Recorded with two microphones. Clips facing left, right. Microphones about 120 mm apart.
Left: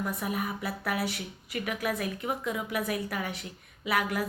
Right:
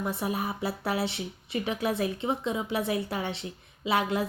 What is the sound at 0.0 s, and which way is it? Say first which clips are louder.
Speech: right 2 dB; 30° right (ahead or behind).